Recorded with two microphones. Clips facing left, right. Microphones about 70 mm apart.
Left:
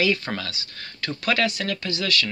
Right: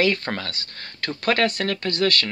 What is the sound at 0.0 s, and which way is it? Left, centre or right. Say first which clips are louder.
Speech: right 2 dB; right.